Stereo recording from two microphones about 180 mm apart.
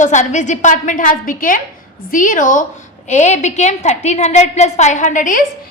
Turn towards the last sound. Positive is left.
turn(degrees=45)  # may be behind; listen again after turning